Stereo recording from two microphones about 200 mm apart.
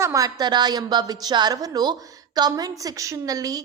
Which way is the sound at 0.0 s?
15° right (ahead or behind).